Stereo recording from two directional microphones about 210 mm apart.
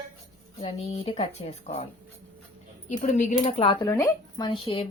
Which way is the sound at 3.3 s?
20° left (ahead or behind).